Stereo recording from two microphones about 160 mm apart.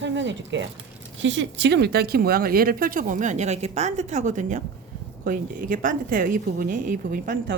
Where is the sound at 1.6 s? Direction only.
90° right; by 4.6 s 50° right (ahead or behind).